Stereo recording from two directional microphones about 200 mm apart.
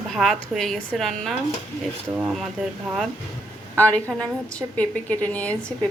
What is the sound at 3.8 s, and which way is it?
A woman's voice, 10° left (ahead or behind).